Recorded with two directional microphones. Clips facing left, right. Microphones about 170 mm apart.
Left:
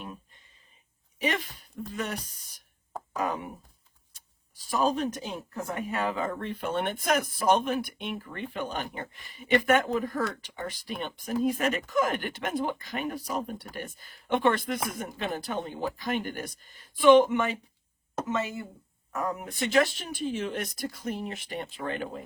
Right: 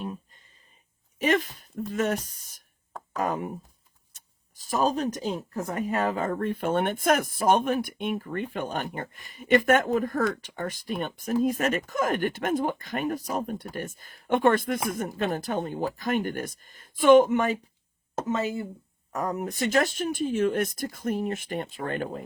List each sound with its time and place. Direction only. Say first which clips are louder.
1.2 s speech: right 6 dB; 45° right (ahead or behind)
4.5 s speech: right 1 dB; 45° right (ahead or behind)
18.3 s speech: right 4 dB; 30° right (ahead or behind); by 22.2 s 45° right (ahead or behind)